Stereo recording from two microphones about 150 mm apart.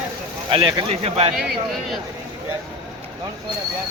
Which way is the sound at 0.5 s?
35° right (ahead or behind).